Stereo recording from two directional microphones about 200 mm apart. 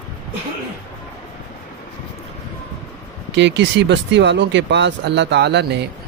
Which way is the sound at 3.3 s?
60° right (ahead or behind).